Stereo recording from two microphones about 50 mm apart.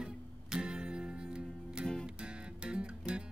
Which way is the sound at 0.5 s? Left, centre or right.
Centre.